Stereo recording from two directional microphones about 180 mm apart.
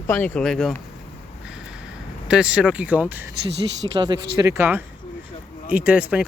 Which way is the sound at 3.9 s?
20° right (ahead or behind).